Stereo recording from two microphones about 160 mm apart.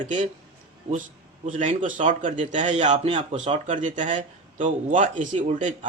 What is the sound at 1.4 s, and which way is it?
A man's voice, 50° right (ahead or behind).